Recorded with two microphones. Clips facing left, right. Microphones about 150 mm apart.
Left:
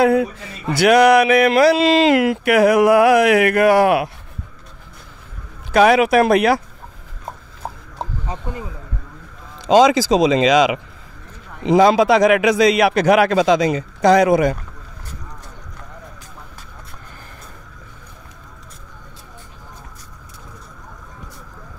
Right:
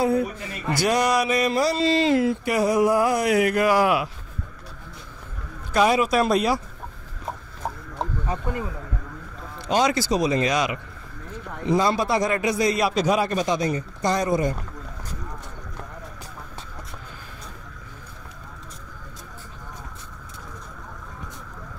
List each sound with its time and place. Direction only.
0.0 s a man's voice: 90° left
0.7 s speech: 65° left (ahead or behind)
5.7 s speech: 75° left (ahead or behind)
9.6 s a man's voice: 90° left